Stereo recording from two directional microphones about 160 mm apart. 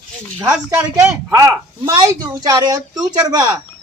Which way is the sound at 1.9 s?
25° right (ahead or behind).